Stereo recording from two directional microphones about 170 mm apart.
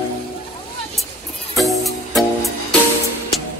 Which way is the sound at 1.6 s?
Centre (ahead or behind).